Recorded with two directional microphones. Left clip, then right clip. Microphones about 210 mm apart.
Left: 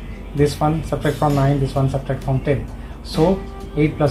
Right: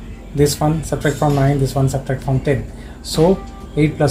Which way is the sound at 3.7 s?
35° right (ahead or behind).